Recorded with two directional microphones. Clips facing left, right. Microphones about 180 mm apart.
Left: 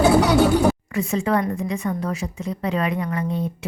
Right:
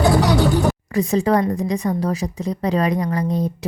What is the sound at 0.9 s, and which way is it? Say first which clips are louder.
A woman's voice: right 4 dB; 35° right (ahead or behind).